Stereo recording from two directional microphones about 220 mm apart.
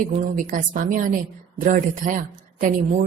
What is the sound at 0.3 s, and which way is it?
A woman's voice, 35° right (ahead or behind).